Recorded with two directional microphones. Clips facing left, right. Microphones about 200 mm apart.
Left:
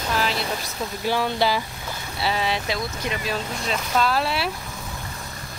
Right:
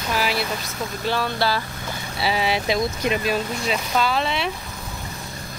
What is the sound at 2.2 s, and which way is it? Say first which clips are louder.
Speech: right 2 dB; 10° right (ahead or behind).